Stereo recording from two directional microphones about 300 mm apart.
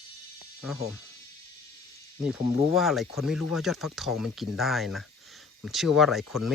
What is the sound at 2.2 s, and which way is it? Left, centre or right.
Speech, centre.